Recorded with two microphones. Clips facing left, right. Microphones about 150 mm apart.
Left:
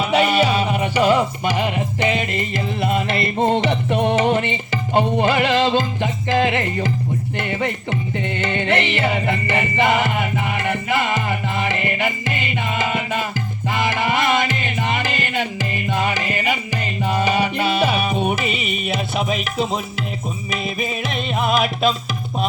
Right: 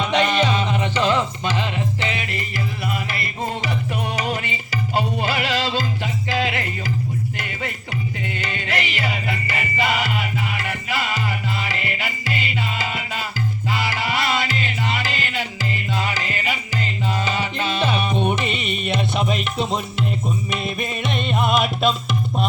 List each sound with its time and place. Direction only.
0.0 s music: 10° left (ahead or behind)
8.4 s music: 25° left (ahead or behind); by 21.9 s centre (ahead or behind)